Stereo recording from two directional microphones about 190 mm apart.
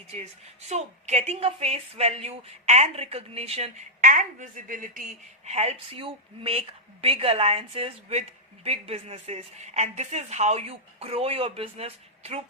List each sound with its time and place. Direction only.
0.7 s a woman's voice: 35° right (ahead or behind)
5.5 s a woman's voice: 35° right (ahead or behind)